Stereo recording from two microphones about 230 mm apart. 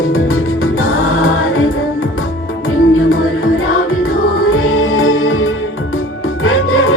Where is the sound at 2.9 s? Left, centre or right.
Left.